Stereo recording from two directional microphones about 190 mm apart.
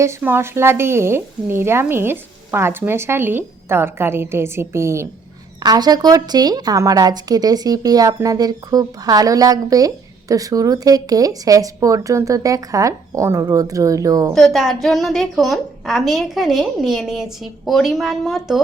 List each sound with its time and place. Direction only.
0.0 s a woman's voice: 10° right (ahead or behind)
14.3 s a woman's voice: centre (ahead or behind)